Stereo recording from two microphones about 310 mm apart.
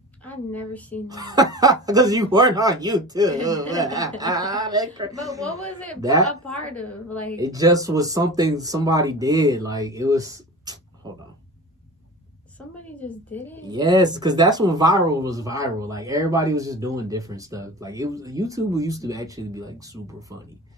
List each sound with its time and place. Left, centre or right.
0.2 s speech: centre
1.0 s speech: centre
6.4 s a woman's voice: centre
7.3 s speech: centre
12.5 s a sound: centre
13.7 s speech: centre